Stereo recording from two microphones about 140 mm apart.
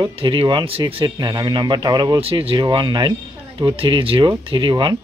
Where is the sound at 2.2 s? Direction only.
45° right (ahead or behind).